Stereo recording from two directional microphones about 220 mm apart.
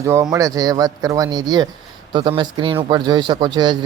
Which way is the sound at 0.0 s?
10° right (ahead or behind).